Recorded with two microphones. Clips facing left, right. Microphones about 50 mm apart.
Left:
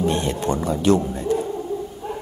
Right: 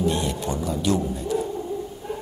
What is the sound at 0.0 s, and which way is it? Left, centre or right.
Speech, left.